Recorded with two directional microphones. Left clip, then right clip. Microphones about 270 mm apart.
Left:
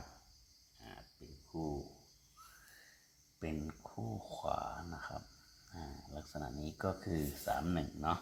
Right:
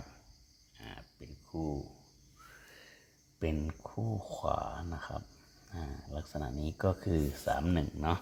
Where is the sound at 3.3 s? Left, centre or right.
Right.